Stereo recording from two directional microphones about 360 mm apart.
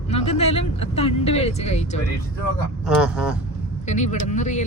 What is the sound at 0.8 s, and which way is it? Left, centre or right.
Speech, centre.